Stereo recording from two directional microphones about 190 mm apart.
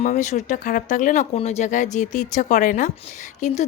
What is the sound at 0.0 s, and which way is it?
Speech, 40° left (ahead or behind).